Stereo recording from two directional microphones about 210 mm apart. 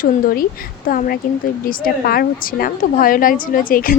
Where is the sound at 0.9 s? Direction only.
40° left (ahead or behind).